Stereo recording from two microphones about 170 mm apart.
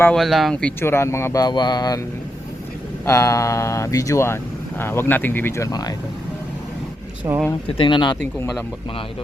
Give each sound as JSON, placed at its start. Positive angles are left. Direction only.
{"t": 0.0, "sound": "a man's voice", "side_deg": 5}
{"t": 3.1, "sound": "a man's voice", "side_deg": 15}
{"t": 7.3, "sound": "speech", "side_deg": -20}
{"t": 7.7, "sound": "speech", "side_deg": 30}
{"t": 8.2, "sound": "a man's voice", "side_deg": 15}